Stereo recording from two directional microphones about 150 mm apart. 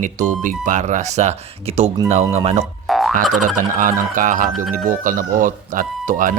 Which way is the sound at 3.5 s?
65° right (ahead or behind).